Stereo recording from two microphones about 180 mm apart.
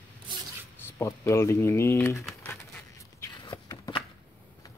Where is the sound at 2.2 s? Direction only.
10° left (ahead or behind).